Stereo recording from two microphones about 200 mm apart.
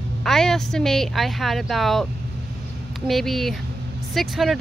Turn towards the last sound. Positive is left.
turn(degrees=0)  # may be behind; listen again after turning